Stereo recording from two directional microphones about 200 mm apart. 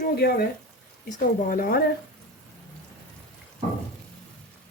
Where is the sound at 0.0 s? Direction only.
50° left (ahead or behind).